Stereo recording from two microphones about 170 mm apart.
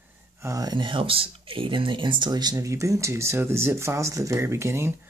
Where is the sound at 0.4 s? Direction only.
20° right (ahead or behind).